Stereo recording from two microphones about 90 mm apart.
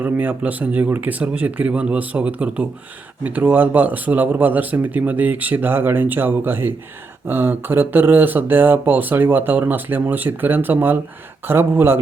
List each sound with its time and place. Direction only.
0.0 s speech: 20° right (ahead or behind)